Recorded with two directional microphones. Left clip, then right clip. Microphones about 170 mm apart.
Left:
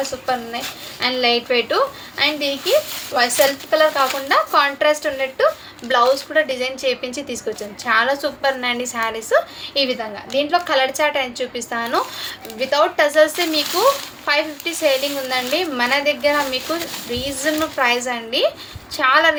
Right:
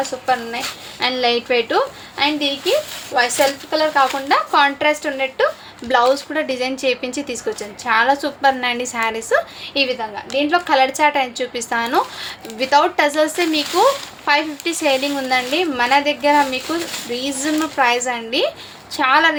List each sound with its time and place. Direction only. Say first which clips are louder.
0.3 s a woman's voice: right 5 dB; 25° right (ahead or behind)